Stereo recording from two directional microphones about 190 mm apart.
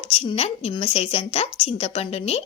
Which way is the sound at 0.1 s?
30° left (ahead or behind).